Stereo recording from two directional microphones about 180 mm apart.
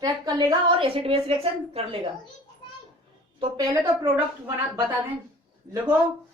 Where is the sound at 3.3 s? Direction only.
20° right (ahead or behind).